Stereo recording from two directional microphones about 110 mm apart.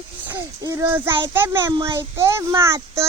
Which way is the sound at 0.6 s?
35° right (ahead or behind).